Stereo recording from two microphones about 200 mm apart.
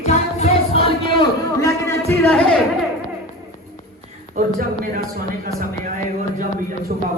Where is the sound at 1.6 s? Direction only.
15° left (ahead or behind).